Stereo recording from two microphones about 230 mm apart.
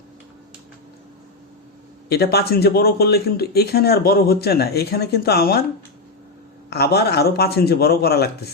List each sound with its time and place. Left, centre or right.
2.0 s speech: left
6.7 s speech: left